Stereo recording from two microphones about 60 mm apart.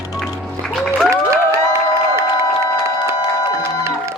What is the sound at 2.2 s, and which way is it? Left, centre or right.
Music, right.